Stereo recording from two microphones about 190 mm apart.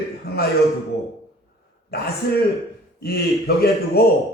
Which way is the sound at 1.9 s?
55° left (ahead or behind).